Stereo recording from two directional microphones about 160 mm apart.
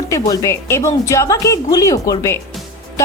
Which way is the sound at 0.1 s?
20° left (ahead or behind).